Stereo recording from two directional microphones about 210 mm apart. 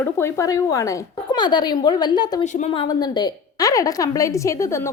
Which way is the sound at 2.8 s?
20° left (ahead or behind).